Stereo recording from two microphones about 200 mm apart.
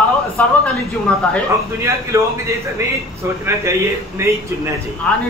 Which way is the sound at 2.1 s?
15° right (ahead or behind).